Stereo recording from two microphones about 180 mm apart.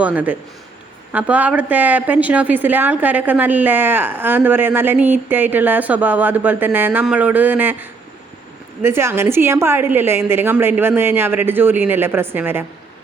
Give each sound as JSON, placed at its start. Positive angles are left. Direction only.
{"t": 0.0, "sound": "a woman's voice", "side_deg": -10}